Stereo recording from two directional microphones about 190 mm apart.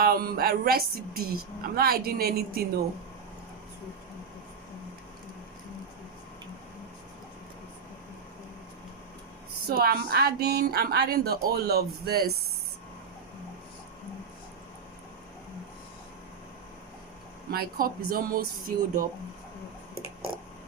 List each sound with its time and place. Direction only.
0.0 s speech: 50° right (ahead or behind)
9.6 s a woman's voice: 55° right (ahead or behind)
17.5 s speech: 50° right (ahead or behind)